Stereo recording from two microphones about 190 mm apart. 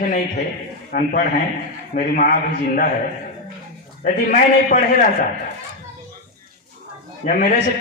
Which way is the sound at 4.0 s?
45° left (ahead or behind).